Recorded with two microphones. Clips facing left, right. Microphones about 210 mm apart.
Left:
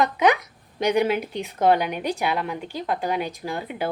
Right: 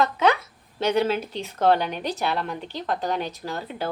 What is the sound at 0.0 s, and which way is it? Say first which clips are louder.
A woman's voice: left 1 dB; 15° left (ahead or behind).